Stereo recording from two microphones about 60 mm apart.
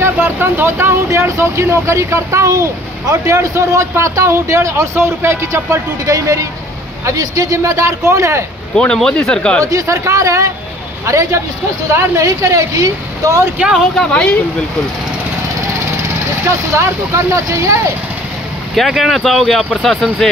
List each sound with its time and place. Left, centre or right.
0.0 s speech: right
2.5 s a child's voice: right
3.3 s speech: right
8.7 s speech: centre
9.7 s speech: right
11.9 s speech: right
13.9 s speech: centre
16.0 s speech: right
18.8 s speech: centre